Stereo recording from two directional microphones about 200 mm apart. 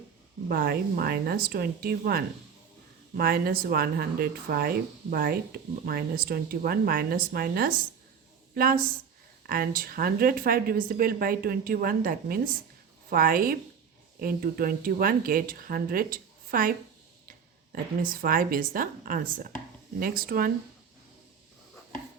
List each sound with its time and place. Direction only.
0.4 s speech: 50° right (ahead or behind)